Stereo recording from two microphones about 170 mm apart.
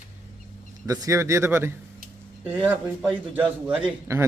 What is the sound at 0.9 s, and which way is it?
Speech, 20° right (ahead or behind).